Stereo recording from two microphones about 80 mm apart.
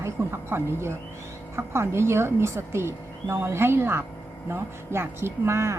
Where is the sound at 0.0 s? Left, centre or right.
Right.